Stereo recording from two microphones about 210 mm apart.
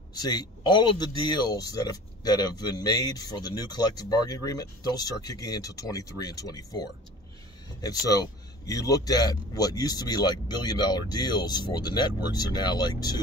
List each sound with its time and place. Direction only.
0.1 s speech: 20° left (ahead or behind)